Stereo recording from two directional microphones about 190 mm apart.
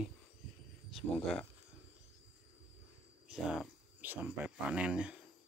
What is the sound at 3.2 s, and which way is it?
Speech, 5° right (ahead or behind).